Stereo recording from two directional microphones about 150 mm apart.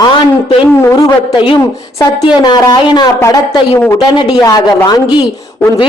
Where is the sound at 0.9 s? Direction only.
30° left (ahead or behind).